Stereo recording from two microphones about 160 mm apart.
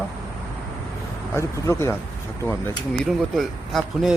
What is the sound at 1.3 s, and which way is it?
Speech, 15° left (ahead or behind).